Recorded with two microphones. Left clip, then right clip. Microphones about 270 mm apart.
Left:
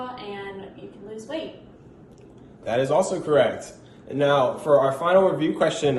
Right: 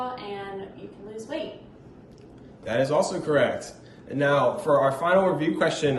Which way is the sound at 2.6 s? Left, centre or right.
Centre.